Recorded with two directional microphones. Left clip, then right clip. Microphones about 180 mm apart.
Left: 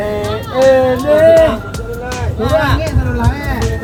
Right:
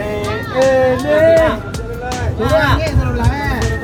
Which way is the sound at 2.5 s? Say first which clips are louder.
Even; 10° right (ahead or behind).